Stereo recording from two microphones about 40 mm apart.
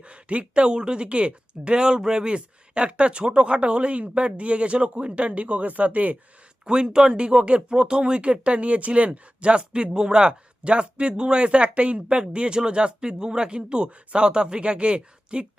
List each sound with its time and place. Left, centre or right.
0.0 s speech: right
6.7 s speech: right